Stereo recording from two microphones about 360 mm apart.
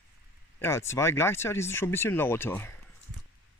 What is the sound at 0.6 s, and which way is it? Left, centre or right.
Speech, centre.